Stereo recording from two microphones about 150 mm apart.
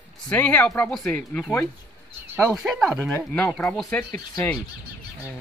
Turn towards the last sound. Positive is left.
turn(degrees=15)  # may be behind; listen again after turning